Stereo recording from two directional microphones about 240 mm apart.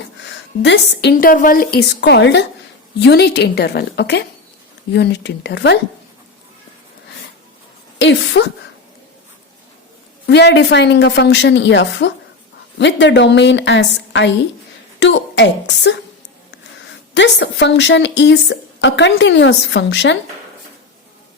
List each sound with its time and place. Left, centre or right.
0.3 s a woman's voice: left
7.9 s a woman's voice: left
10.2 s a woman's voice: left
17.2 s a woman's voice: left